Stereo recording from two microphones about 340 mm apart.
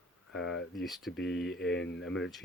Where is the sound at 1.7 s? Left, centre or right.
Left.